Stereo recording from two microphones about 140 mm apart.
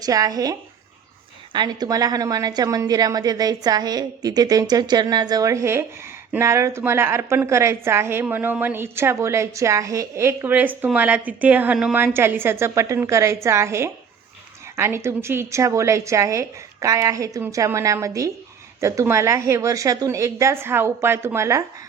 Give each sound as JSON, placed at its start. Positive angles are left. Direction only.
{"t": 0.0, "sound": "a woman's voice", "side_deg": -25}
{"t": 1.5, "sound": "a woman's voice", "side_deg": -30}